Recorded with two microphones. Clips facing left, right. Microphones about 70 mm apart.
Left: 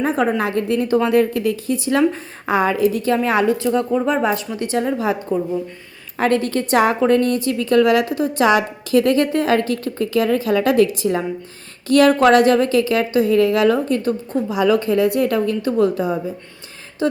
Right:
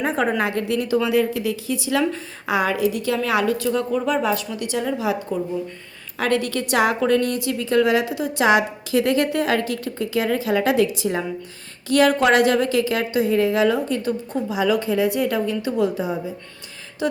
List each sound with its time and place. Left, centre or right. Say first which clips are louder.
0.3 s a woman's voice: left 3 dB; left
13.7 s a woman's voice: left 3 dB; left